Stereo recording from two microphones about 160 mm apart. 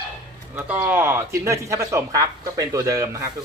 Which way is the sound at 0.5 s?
15° right (ahead or behind).